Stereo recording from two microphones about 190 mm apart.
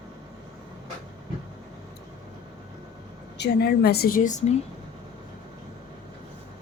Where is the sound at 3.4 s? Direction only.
55° left (ahead or behind).